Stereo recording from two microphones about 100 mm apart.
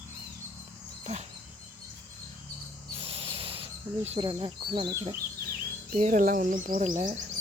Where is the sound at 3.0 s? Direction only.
70° right (ahead or behind).